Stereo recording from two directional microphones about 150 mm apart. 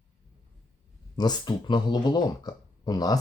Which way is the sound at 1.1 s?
30° left (ahead or behind).